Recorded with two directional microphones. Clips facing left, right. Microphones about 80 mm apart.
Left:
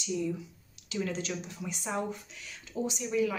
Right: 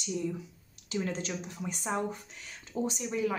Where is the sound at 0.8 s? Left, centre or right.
Right.